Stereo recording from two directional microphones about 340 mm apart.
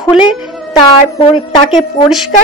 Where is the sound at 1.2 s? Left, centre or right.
Centre.